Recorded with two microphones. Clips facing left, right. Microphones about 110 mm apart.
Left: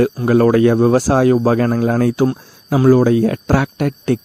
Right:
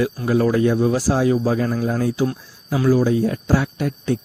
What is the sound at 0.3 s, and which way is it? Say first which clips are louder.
Speech: left 6 dB; 60° left (ahead or behind).